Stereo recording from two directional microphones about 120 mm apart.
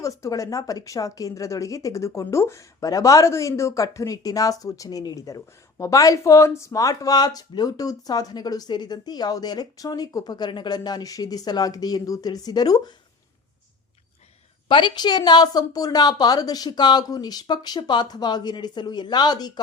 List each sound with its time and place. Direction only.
0.0 s a woman's voice: 25° left (ahead or behind)
14.7 s speech: 45° left (ahead or behind)